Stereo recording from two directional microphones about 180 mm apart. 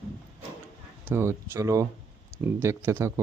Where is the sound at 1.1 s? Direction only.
15° right (ahead or behind).